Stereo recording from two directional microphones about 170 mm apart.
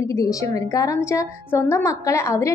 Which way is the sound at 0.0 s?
20° left (ahead or behind).